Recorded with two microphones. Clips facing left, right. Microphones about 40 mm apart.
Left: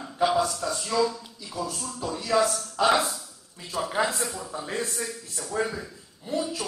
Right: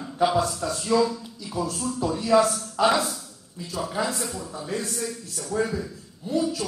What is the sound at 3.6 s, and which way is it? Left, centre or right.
A man's voice, left.